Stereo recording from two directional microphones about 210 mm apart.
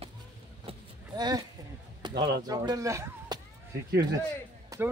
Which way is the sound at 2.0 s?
20° right (ahead or behind).